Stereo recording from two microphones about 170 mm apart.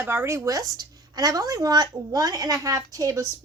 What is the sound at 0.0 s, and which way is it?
Speech, 15° right (ahead or behind).